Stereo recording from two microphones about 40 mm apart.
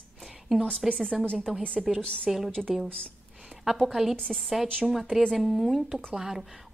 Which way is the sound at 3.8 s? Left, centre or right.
Centre.